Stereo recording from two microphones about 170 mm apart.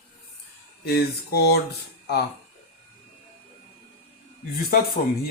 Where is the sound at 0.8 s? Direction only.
75° left (ahead or behind).